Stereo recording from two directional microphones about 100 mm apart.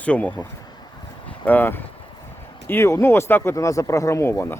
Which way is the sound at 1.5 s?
20° left (ahead or behind).